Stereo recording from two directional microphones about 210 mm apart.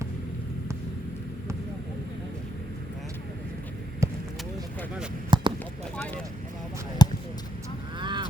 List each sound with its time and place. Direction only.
4.0 s basketball bounce: 15° right (ahead or behind)
5.3 s a sound: 25° right (ahead or behind)
6.0 s speech: 5° left (ahead or behind)
7.0 s basketball bounce: 20° left (ahead or behind)
7.9 s vehicle: 20° right (ahead or behind)